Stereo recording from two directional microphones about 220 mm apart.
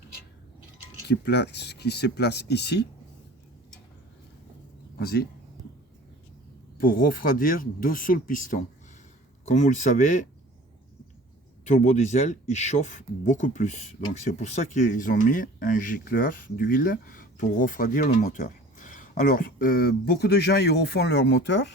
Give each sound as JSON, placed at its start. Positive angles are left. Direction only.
{"t": 1.0, "sound": "speech", "side_deg": 50}
{"t": 4.9, "sound": "speech", "side_deg": 45}
{"t": 6.7, "sound": "speech", "side_deg": 40}
{"t": 11.6, "sound": "speech", "side_deg": 35}